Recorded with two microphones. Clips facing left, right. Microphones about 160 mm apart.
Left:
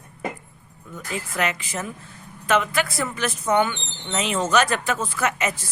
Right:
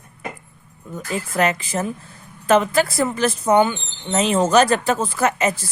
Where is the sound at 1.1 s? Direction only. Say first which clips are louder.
Right 6 dB; 40° right (ahead or behind).